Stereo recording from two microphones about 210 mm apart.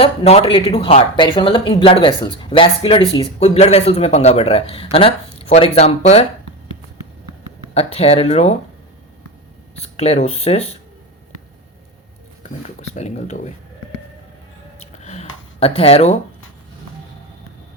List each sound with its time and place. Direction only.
0.0 s speech: 30° left (ahead or behind)
7.7 s speech: 30° left (ahead or behind)
9.7 s speech: 30° left (ahead or behind)
12.9 s speech: 30° left (ahead or behind)
14.8 s a sound: 35° left (ahead or behind)